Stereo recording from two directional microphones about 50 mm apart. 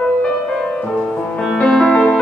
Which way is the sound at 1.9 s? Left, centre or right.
Centre.